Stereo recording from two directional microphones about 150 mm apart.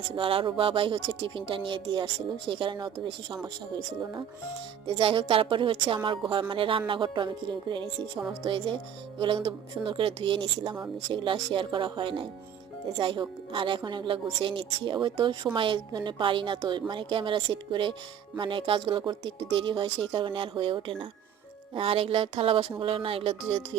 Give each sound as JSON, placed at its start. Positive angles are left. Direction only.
{"t": 0.2, "sound": "a woman's voice", "side_deg": -35}
{"t": 4.9, "sound": "speech", "side_deg": -35}